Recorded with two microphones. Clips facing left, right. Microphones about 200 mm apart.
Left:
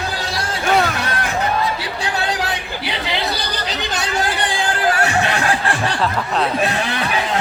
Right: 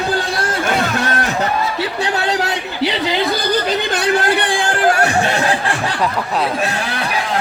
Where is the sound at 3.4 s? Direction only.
50° right (ahead or behind).